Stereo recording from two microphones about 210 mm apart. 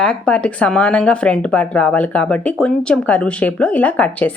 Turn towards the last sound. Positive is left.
turn(degrees=5)  # may be behind; listen again after turning